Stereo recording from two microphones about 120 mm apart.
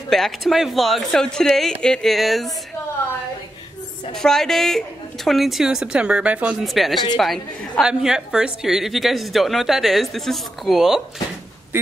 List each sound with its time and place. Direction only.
0.1 s a woman's voice: centre (ahead or behind)
4.1 s a woman's voice: 5° left (ahead or behind)
6.6 s a woman's voice: centre (ahead or behind)